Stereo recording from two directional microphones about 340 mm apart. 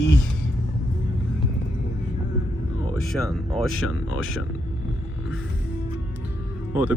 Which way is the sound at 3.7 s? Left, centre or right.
Left.